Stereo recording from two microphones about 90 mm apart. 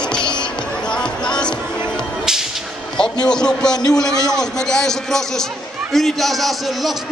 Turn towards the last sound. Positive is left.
turn(degrees=0)  # may be behind; listen again after turning